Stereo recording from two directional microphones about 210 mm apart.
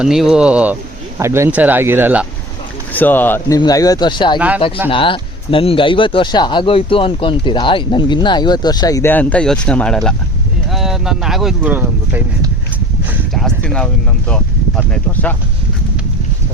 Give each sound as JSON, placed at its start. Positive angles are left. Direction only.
{"t": 0.0, "sound": "speech", "side_deg": 0}
{"t": 2.9, "sound": "speech", "side_deg": 10}
{"t": 4.4, "sound": "speech", "side_deg": -5}
{"t": 4.9, "sound": "speech", "side_deg": 25}
{"t": 13.3, "sound": "speech", "side_deg": 0}